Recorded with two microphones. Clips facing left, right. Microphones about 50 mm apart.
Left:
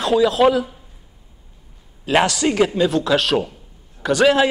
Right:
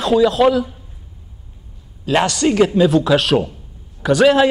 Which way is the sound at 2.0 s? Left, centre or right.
Centre.